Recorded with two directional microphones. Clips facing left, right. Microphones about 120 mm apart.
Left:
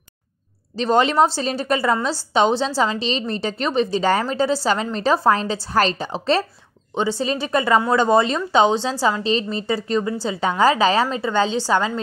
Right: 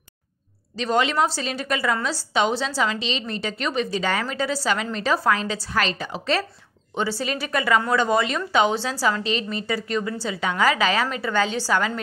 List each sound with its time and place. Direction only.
0.7 s a woman's voice: 35° left (ahead or behind)